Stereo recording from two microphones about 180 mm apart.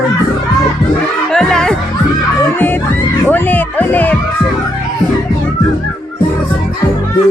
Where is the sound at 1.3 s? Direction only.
5° left (ahead or behind).